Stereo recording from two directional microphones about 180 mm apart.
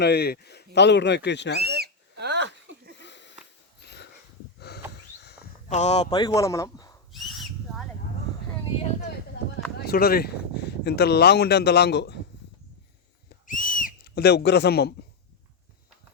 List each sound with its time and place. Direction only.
0.0 s speech: 65° left (ahead or behind)
1.6 s a sound: 60° right (ahead or behind)
3.0 s sniff: 75° left (ahead or behind)
3.8 s dog: 65° left (ahead or behind)
4.7 s a sound: 65° left (ahead or behind)
5.6 s speech: 40° left (ahead or behind)
6.1 s speech: 20° left (ahead or behind)
7.1 s a sound: centre (ahead or behind)
9.8 s speech: 60° left (ahead or behind)
13.5 s whistle: 50° left (ahead or behind)